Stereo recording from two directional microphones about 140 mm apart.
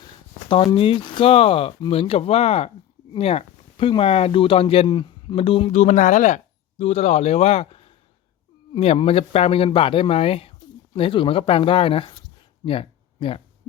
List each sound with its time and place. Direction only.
0.0 s speech: 35° left (ahead or behind)
5.7 s speech: 55° left (ahead or behind); by 12.2 s 40° left (ahead or behind)
12.6 s a sound: 40° left (ahead or behind)